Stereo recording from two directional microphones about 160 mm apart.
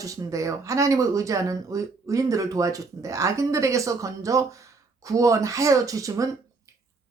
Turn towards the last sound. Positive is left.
turn(degrees=-20)  # may be behind; listen again after turning